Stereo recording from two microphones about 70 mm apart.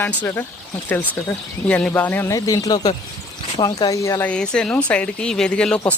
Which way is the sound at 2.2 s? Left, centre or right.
Left.